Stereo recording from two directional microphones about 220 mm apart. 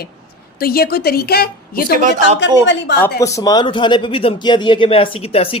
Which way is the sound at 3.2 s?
15° left (ahead or behind).